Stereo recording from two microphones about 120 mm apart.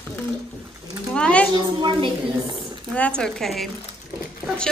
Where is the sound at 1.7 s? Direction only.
40° right (ahead or behind).